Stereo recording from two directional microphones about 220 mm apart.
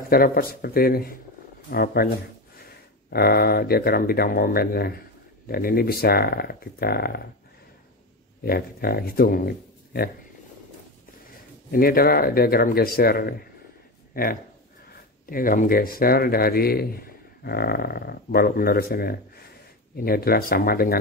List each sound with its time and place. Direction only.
0.1 s speech: 40° left (ahead or behind)
8.5 s speech: 45° left (ahead or behind)
11.7 s speech: 40° left (ahead or behind)